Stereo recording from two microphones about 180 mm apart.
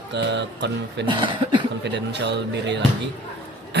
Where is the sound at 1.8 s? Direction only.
70° right (ahead or behind).